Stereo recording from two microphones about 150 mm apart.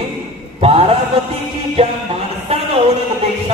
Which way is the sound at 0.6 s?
40° right (ahead or behind).